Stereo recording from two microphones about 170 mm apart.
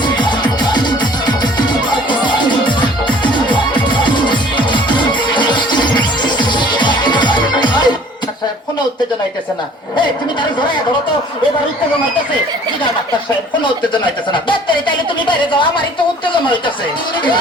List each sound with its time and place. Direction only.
0.0 s music: 25° left (ahead or behind)
13.9 s a woman's voice: 30° left (ahead or behind)